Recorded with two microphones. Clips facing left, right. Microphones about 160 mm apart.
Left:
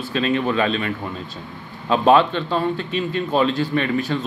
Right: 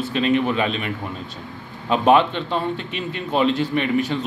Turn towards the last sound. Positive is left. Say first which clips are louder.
# even
turn(degrees=-20)  # may be behind; listen again after turning